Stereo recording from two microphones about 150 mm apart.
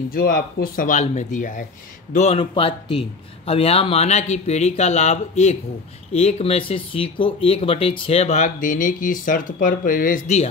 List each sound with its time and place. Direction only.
0.1 s speech: 75° left (ahead or behind); by 1.7 s 60° left (ahead or behind)
2.1 s speech: 40° left (ahead or behind)